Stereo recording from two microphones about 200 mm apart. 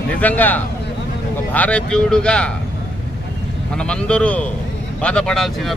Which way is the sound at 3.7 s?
5° left (ahead or behind).